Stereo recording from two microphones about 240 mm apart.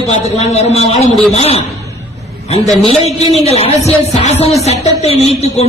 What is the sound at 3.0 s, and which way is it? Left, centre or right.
A man's voice, left.